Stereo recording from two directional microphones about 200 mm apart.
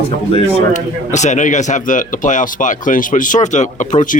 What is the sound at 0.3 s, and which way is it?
Speech, 35° left (ahead or behind).